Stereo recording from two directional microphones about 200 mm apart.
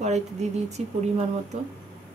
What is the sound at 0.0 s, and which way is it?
Speech, 35° right (ahead or behind).